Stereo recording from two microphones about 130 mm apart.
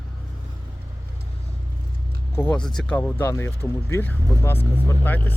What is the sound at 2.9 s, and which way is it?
Speech, 15° left (ahead or behind).